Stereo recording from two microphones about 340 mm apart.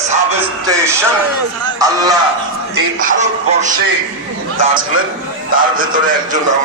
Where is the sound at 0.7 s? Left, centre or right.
Centre.